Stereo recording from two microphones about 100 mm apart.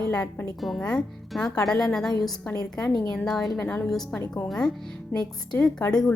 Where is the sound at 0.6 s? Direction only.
5° left (ahead or behind).